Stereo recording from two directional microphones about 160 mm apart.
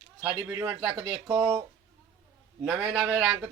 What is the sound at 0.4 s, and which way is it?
Speech, 10° right (ahead or behind).